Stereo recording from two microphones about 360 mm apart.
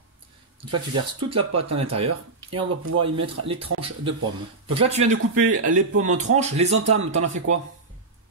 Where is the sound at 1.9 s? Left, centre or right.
Right.